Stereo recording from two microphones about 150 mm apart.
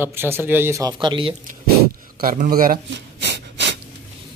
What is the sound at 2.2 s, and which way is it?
Speech, 75° right (ahead or behind).